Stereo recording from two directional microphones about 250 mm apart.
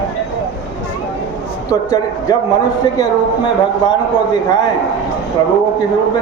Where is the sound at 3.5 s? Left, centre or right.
Centre.